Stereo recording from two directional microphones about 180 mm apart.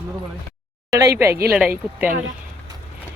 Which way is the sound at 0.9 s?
15° right (ahead or behind).